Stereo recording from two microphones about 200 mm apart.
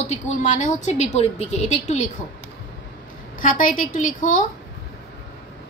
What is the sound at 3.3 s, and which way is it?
A woman's voice, 40° left (ahead or behind).